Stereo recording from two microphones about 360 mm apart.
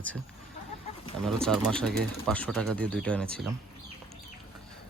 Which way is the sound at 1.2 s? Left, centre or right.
Centre.